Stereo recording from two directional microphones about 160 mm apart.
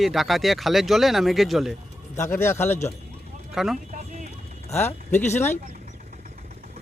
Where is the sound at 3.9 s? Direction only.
50° right (ahead or behind).